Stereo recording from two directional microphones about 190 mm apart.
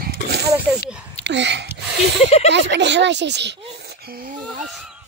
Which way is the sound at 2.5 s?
65° right (ahead or behind).